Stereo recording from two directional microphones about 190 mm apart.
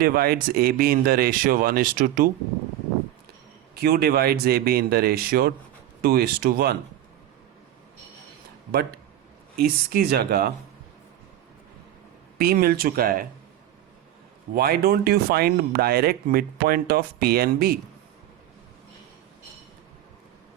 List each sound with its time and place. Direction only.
0.0 s speech: 55° right (ahead or behind)
3.8 s speech: 55° right (ahead or behind)
8.7 s speech: 55° right (ahead or behind)
12.4 s speech: 50° right (ahead or behind)
14.5 s speech: 55° right (ahead or behind)